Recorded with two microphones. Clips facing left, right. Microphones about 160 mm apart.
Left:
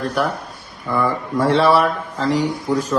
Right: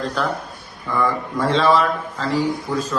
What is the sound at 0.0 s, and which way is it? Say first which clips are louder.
Speech: left 2 dB; 15° left (ahead or behind).